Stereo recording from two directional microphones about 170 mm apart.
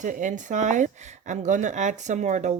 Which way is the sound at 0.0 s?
45° right (ahead or behind).